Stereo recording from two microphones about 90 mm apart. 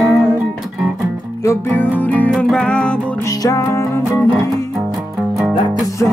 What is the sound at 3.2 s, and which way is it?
Music, 35° left (ahead or behind).